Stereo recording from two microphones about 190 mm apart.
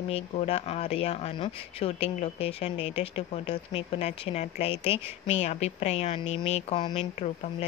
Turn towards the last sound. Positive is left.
turn(degrees=30)  # may be behind; listen again after turning